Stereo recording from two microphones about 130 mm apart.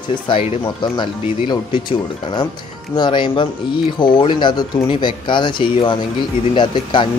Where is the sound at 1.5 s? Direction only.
40° left (ahead or behind).